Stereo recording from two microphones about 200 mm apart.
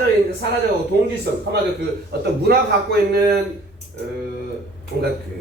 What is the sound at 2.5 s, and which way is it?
Speech, 50° right (ahead or behind).